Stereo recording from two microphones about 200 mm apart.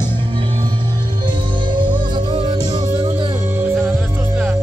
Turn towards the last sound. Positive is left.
turn(degrees=-10)  # may be behind; listen again after turning